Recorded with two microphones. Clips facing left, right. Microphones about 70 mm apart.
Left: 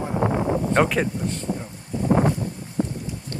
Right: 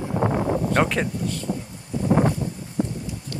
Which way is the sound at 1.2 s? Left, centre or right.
Left.